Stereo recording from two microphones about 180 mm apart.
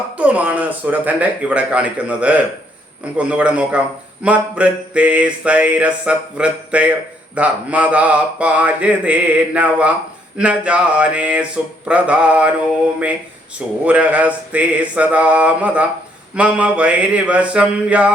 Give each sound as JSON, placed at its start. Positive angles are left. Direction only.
{"t": 0.2, "sound": "a man's voice", "side_deg": -5}
{"t": 13.8, "sound": "a man's voice", "side_deg": -10}